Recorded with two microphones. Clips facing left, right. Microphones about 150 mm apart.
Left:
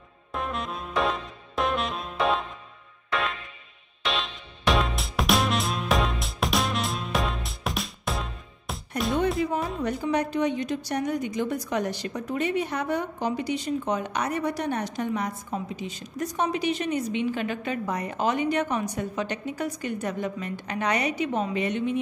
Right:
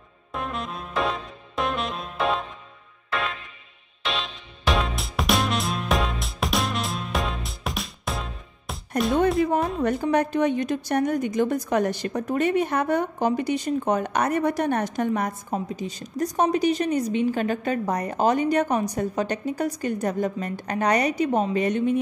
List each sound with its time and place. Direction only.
0.3 s saxophone: centre (ahead or behind)
3.1 s music: centre (ahead or behind)
9.8 s a woman's voice: 50° right (ahead or behind)